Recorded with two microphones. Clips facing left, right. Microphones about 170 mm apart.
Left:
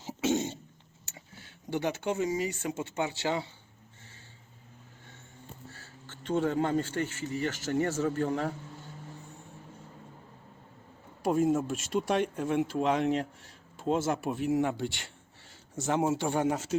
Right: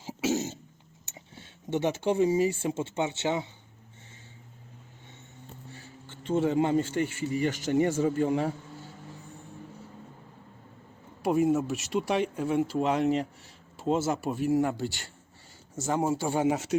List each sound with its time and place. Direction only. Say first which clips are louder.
0.0 s throat clearing: even; 5° right (ahead or behind)
1.0 s speech: right 2 dB; 20° right (ahead or behind)
5.7 s speech: right 4 dB; 15° right (ahead or behind)
11.2 s speech: right 2 dB; 5° right (ahead or behind)